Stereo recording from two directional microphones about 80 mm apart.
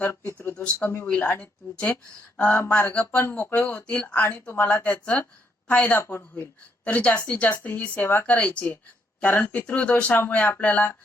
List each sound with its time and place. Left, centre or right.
0.0 s speech: left
0.4 s speech: centre
0.8 s speech: left
1.4 s speech: centre
2.5 s speech: left
6.0 s speech: left
6.9 s speech: left
8.0 s speech: left
8.3 s speech: centre